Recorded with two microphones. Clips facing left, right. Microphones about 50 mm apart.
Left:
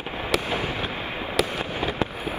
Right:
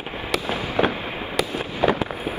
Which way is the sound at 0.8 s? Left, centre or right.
Right.